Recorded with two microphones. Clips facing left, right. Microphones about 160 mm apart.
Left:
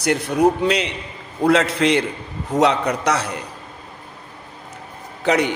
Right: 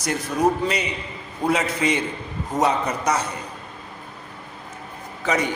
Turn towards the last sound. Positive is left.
turn(degrees=70)  # may be behind; listen again after turning